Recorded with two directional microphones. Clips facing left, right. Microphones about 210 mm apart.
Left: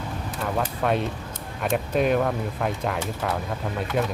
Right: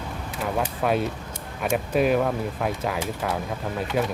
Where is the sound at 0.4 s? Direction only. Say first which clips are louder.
Even; 5° right (ahead or behind).